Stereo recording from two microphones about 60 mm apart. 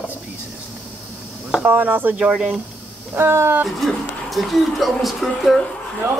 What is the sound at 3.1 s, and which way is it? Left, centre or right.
Speech, right.